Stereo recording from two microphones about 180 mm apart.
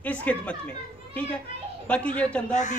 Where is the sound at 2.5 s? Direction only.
40° left (ahead or behind).